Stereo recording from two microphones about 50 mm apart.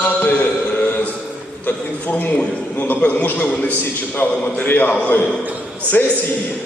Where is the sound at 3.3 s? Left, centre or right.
Left.